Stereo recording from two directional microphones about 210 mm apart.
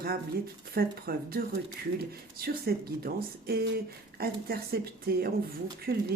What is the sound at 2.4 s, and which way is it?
Speech, 45° right (ahead or behind).